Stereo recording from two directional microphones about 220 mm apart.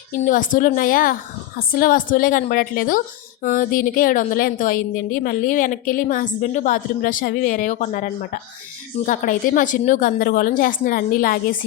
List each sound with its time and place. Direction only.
0.1 s a woman's voice: 35° left (ahead or behind)